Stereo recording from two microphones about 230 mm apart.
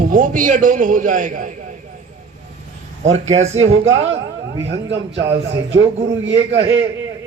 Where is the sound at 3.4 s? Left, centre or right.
Right.